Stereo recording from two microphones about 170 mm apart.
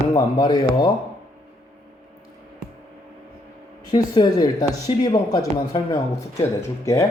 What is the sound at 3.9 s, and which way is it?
Speech, 25° left (ahead or behind).